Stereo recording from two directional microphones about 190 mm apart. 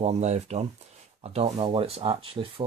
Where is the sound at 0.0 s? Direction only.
35° right (ahead or behind).